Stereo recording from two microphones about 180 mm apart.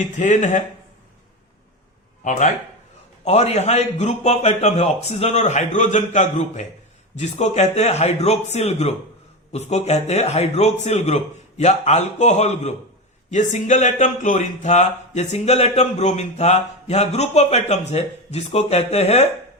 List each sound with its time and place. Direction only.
0.2 s speech: 40° left (ahead or behind)
2.2 s speech: 45° left (ahead or behind)